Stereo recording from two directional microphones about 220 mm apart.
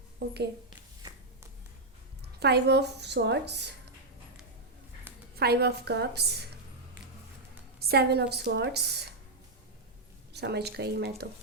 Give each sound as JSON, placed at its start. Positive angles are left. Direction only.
{"t": 0.2, "sound": "a woman's voice", "side_deg": -50}
{"t": 2.4, "sound": "a woman's voice", "side_deg": -50}
{"t": 5.4, "sound": "a woman's voice", "side_deg": -45}
{"t": 7.8, "sound": "a woman's voice", "side_deg": -45}
{"t": 10.3, "sound": "a woman's voice", "side_deg": -50}